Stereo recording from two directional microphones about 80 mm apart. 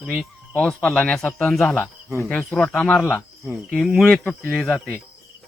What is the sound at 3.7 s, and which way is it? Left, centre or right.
Speech, centre.